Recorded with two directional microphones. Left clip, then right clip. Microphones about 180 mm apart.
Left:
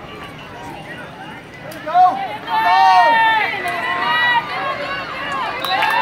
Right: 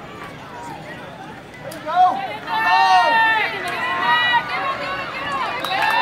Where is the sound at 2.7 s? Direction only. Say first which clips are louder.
Left 3 dB; 40° left (ahead or behind).